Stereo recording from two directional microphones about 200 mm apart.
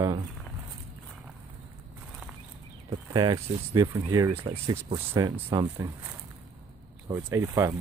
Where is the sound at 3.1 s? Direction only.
20° right (ahead or behind).